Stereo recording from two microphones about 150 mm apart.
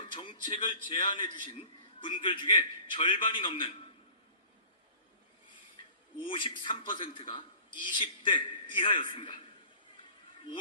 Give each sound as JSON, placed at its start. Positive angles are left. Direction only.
{"t": 0.0, "sound": "a man's voice", "side_deg": 35}
{"t": 6.1, "sound": "a man's voice", "side_deg": 35}